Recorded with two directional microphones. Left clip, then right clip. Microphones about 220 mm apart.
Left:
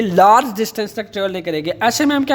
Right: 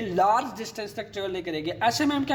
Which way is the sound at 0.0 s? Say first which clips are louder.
Left 12 dB; 45° left (ahead or behind).